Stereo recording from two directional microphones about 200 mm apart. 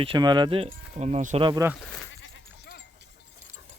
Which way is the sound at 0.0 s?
25° right (ahead or behind).